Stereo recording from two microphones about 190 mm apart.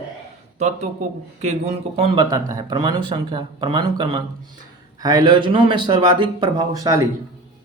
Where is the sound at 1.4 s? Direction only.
35° right (ahead or behind).